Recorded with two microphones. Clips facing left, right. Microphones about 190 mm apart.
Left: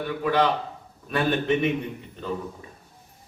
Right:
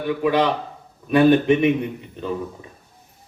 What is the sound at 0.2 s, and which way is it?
A man's voice, 15° right (ahead or behind).